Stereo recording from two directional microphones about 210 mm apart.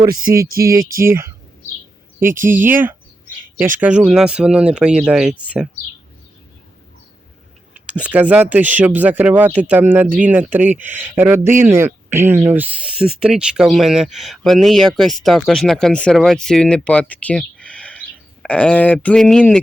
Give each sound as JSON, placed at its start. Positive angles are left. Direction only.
{"t": 0.4, "sound": "music", "side_deg": -45}
{"t": 1.0, "sound": "speech", "side_deg": -10}
{"t": 7.7, "sound": "speech", "side_deg": -5}